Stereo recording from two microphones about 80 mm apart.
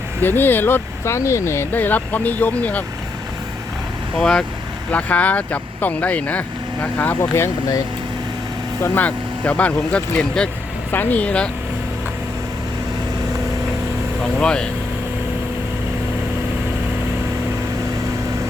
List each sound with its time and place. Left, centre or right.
0.2 s speech: left
4.2 s speech: centre
7.2 s speech: left
9.0 s speech: centre
10.9 s speech: left
14.3 s speech: centre